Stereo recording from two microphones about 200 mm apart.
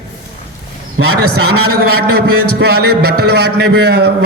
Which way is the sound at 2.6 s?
50° right (ahead or behind).